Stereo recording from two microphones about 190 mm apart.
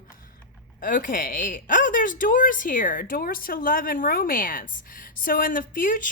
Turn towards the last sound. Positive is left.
turn(degrees=45)  # may be behind; listen again after turning